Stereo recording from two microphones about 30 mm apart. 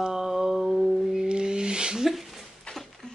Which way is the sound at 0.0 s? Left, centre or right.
Centre.